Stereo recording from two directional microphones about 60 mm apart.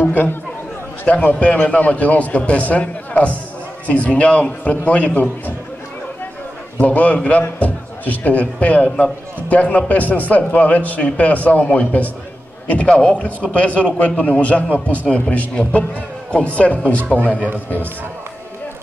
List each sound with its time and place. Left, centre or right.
0.0 s speech: left
1.0 s a man's voice: left
6.8 s a man's voice: left